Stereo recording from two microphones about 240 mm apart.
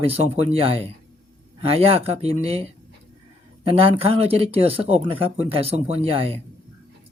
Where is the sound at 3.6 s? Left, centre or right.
Right.